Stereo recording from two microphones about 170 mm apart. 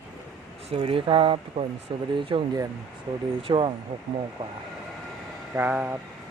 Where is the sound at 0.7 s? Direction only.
30° right (ahead or behind).